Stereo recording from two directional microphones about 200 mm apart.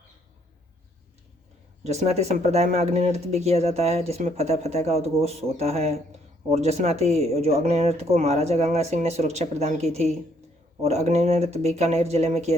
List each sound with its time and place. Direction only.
1.8 s speech: 35° right (ahead or behind)